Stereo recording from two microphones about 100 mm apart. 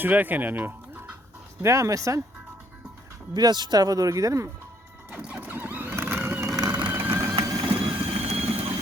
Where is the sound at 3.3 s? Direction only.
45° right (ahead or behind).